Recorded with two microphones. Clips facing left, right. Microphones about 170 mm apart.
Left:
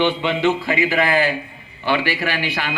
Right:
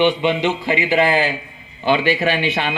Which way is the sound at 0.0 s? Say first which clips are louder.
Right 2 dB; 20° right (ahead or behind).